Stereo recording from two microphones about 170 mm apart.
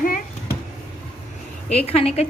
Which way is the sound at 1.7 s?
35° left (ahead or behind).